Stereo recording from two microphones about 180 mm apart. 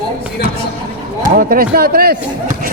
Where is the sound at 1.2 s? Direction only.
55° right (ahead or behind).